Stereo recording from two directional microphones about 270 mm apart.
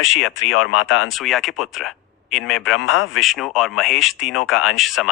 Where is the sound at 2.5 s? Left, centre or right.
Left.